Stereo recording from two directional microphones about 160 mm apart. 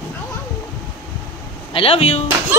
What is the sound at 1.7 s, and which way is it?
Speech, 35° left (ahead or behind).